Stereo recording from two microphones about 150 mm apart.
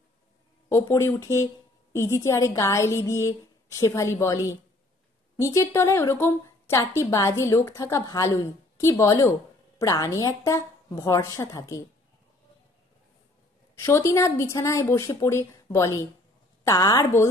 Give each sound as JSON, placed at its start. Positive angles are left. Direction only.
{"t": 0.7, "sound": "a woman's voice", "side_deg": 20}
{"t": 13.7, "sound": "a woman's voice", "side_deg": 20}